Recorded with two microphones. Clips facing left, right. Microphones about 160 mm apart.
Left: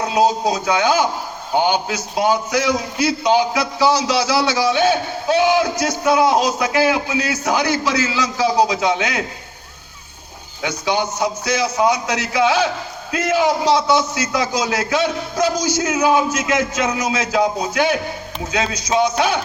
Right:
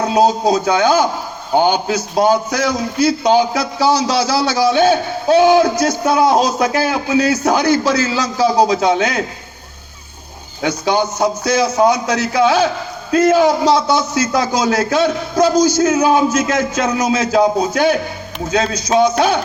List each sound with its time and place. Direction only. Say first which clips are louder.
0.0 s a man's voice: right 3 dB; 40° right (ahead or behind)
10.6 s a man's voice: right 4 dB; 40° right (ahead or behind)